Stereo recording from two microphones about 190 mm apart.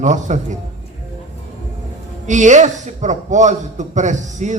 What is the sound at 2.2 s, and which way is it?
A man's voice, 40° right (ahead or behind).